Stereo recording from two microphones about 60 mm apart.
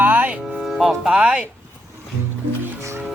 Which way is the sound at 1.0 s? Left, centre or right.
Centre.